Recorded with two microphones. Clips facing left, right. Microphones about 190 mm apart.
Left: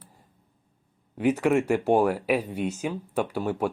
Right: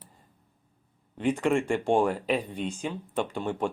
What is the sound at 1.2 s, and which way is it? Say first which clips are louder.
Speech: left 3 dB; 10° left (ahead or behind).